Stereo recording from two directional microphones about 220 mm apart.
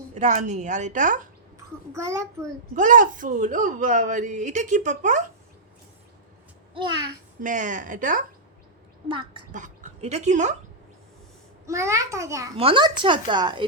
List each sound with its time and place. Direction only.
0.1 s speech: 30° right (ahead or behind)
1.9 s a child's voice: 15° right (ahead or behind)
2.7 s speech: 35° right (ahead or behind)
6.7 s speech: 20° right (ahead or behind)
7.4 s speech: 35° right (ahead or behind)
9.0 s speech: 20° right (ahead or behind)
9.5 s speech: 35° right (ahead or behind)
11.6 s a child's voice: 15° right (ahead or behind)